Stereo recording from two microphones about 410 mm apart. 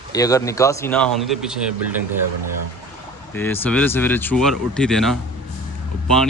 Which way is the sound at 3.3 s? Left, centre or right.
Centre.